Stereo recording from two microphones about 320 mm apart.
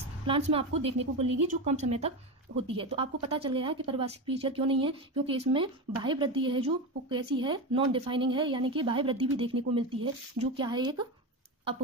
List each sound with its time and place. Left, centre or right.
0.3 s a woman's voice: centre